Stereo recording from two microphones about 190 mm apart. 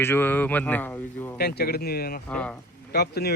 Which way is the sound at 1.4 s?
55° left (ahead or behind).